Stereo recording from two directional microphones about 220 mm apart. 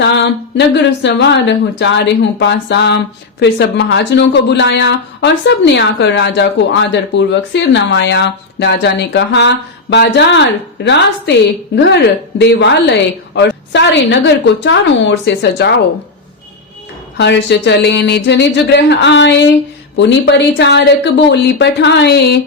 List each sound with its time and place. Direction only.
0.0 s a woman's voice: 50° left (ahead or behind)
12.4 s a woman's voice: 50° left (ahead or behind)
17.2 s a woman's voice: 50° left (ahead or behind)